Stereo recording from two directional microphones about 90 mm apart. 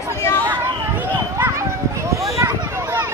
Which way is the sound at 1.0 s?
25° right (ahead or behind).